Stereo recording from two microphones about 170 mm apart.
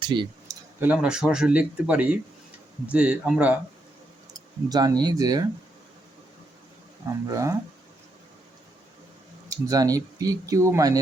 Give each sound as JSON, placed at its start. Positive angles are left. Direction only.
{"t": 0.0, "sound": "speech", "side_deg": -25}
{"t": 0.8, "sound": "speech", "side_deg": -5}
{"t": 4.4, "sound": "speech", "side_deg": -25}
{"t": 7.3, "sound": "speech", "side_deg": -20}
{"t": 9.5, "sound": "speech", "side_deg": -20}